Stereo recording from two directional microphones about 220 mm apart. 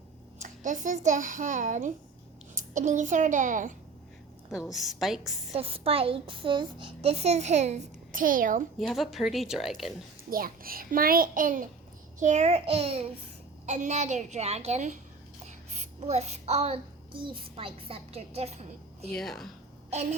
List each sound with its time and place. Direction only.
0.4 s a child's voice: 35° right (ahead or behind)
4.6 s a woman's voice: centre (ahead or behind)
5.5 s a child's voice: 25° right (ahead or behind)
8.9 s a woman's voice: centre (ahead or behind)
10.2 s a child's voice: 40° right (ahead or behind)
15.4 s child singing: 30° right (ahead or behind)
19.1 s a woman's voice: centre (ahead or behind)